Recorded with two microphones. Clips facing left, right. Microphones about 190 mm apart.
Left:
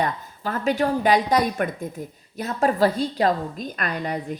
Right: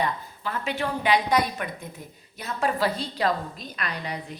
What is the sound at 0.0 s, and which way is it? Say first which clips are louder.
A woman's voice: left 3 dB; 45° left (ahead or behind).